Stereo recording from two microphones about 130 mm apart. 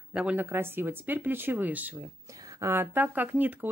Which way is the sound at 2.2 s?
25° right (ahead or behind).